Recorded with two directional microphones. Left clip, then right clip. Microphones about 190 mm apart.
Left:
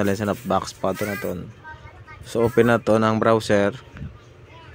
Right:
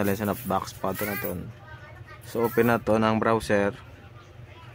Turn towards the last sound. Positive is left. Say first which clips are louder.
# left 5 dB
turn(degrees=15)  # may be behind; listen again after turning